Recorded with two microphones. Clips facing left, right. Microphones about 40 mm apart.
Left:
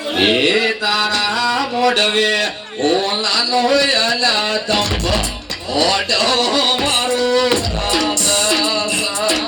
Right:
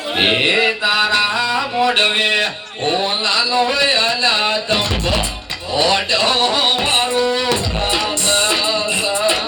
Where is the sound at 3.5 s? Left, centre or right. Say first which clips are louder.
Left 3 dB; right.